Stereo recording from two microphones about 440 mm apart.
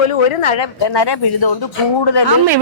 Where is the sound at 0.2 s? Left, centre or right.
Left.